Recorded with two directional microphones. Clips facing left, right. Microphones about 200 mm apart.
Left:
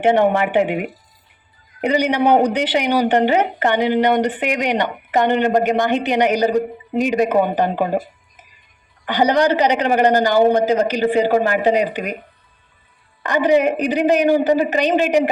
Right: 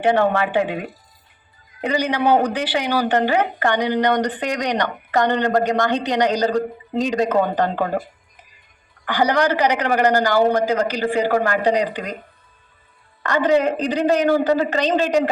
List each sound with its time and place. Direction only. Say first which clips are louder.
0.0 s speech: left 2 dB; 20° left (ahead or behind)
9.0 s speech: left 3 dB; 20° left (ahead or behind)
13.2 s a woman's voice: left 2 dB; 15° left (ahead or behind)